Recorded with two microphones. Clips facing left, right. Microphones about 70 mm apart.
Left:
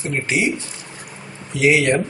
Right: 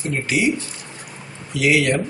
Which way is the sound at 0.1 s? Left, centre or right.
Left.